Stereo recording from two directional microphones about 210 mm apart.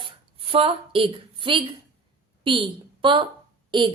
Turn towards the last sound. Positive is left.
turn(degrees=-25)  # may be behind; listen again after turning